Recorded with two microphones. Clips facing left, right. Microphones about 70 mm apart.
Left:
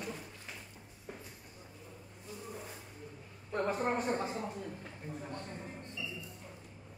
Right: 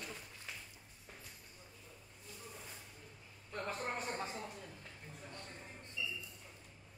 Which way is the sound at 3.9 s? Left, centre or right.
Left.